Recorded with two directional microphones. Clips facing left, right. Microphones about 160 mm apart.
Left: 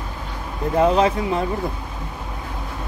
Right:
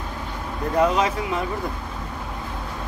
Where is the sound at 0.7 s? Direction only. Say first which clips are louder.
Left 3 dB; 25° left (ahead or behind).